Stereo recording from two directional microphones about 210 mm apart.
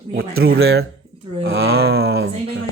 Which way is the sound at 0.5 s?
70° right (ahead or behind).